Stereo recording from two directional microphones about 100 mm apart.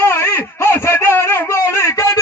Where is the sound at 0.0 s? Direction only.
25° left (ahead or behind).